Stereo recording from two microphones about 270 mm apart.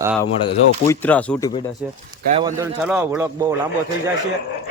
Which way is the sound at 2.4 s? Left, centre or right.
Centre.